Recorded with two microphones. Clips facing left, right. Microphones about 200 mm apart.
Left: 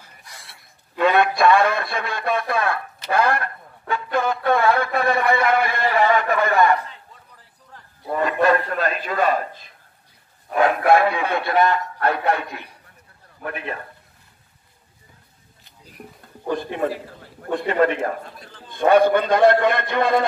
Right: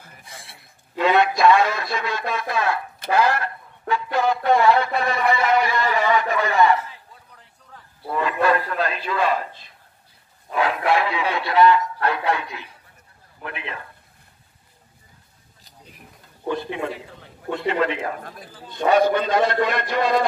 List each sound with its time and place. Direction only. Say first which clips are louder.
0.9 s speech: left 1 dB; 55° left (ahead or behind)
8.1 s speech: left 2 dB; 45° left (ahead or behind)
16.0 s a sound: left 11 dB; 50° left (ahead or behind)
16.4 s speech: left 2 dB; 45° left (ahead or behind)